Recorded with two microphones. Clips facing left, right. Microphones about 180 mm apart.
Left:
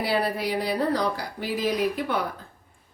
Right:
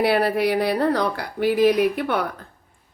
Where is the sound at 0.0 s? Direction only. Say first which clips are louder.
Right 6 dB; 65° right (ahead or behind).